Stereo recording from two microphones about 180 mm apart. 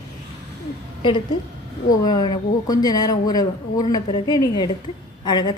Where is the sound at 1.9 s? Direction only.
25° left (ahead or behind).